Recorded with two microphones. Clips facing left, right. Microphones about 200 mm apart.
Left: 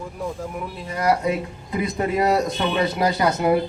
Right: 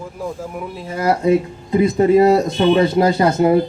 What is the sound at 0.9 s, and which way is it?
Speech, 25° right (ahead or behind).